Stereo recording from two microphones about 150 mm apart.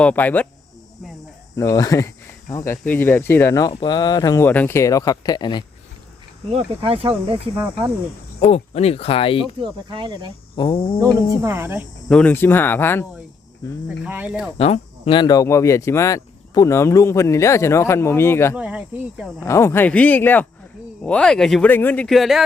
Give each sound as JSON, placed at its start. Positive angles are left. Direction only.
{"t": 0.0, "sound": "speech", "side_deg": 10}
{"t": 1.5, "sound": "speech", "side_deg": 20}
{"t": 2.8, "sound": "speech", "side_deg": 10}
{"t": 3.7, "sound": "speech", "side_deg": 35}
{"t": 6.5, "sound": "speech", "side_deg": -40}
{"t": 8.4, "sound": "speech", "side_deg": 45}
{"t": 9.6, "sound": "speech", "side_deg": -35}
{"t": 10.5, "sound": "speech", "side_deg": 35}
{"t": 11.4, "sound": "speech", "side_deg": -15}
{"t": 12.0, "sound": "speech", "side_deg": 10}
{"t": 13.8, "sound": "speech", "side_deg": -10}
{"t": 14.6, "sound": "speech", "side_deg": 40}
{"t": 18.5, "sound": "speech", "side_deg": -10}
{"t": 19.4, "sound": "speech", "side_deg": 20}